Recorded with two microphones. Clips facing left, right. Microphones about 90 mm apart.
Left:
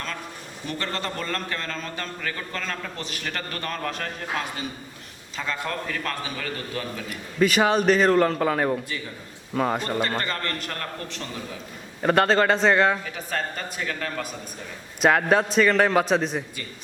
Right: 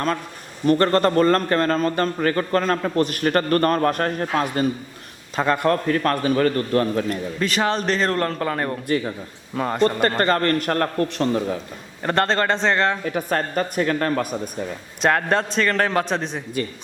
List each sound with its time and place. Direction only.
0.7 s a man's voice: 50° right (ahead or behind)
7.3 s a man's voice: 5° left (ahead or behind)
10.2 s a man's voice: 45° right (ahead or behind)
12.0 s a man's voice: 5° left (ahead or behind)
13.1 s a man's voice: 45° right (ahead or behind)
15.0 s a man's voice: 5° left (ahead or behind)